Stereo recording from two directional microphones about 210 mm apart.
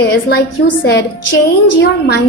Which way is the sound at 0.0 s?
55° left (ahead or behind).